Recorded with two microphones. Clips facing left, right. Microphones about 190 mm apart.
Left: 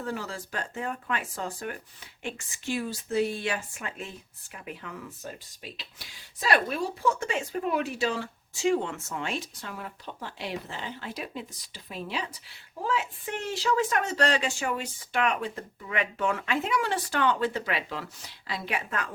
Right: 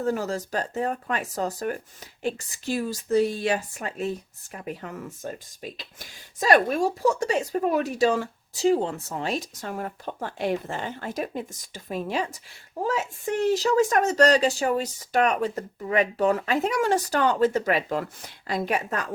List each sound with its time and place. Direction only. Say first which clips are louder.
0.0 s a woman's voice: right 8 dB; 45° right (ahead or behind)